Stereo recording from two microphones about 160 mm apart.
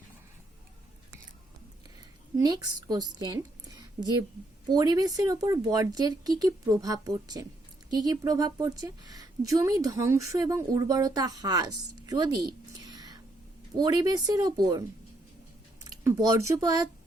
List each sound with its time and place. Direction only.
2.4 s a woman's voice: 25° right (ahead or behind)
12.8 s whispering: 25° right (ahead or behind)
13.7 s a woman's voice: 25° right (ahead or behind)